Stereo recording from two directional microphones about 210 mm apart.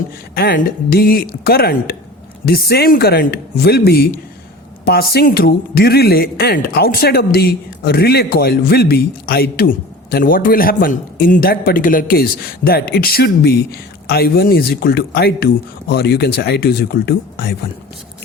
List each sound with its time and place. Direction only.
0.3 s speech: 45° left (ahead or behind)